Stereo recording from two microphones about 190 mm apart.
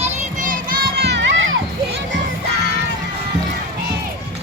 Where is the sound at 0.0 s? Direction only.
40° right (ahead or behind); by 1.5 s 65° right (ahead or behind).